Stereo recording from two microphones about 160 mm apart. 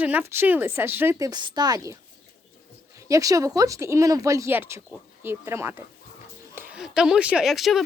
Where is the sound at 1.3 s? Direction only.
25° right (ahead or behind).